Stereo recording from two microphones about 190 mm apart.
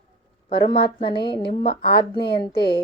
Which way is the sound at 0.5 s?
30° left (ahead or behind).